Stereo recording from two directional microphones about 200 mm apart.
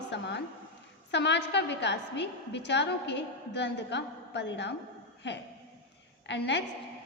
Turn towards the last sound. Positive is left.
turn(degrees=60)  # may be behind; listen again after turning